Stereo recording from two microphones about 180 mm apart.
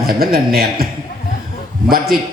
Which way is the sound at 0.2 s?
55° right (ahead or behind).